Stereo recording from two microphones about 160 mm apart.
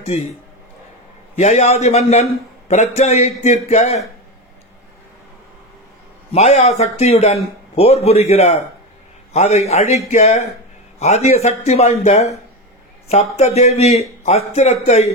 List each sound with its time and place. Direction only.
0.1 s a man's voice: 45° left (ahead or behind)
1.3 s a man's voice: 45° left (ahead or behind)
6.3 s a man's voice: 45° left (ahead or behind)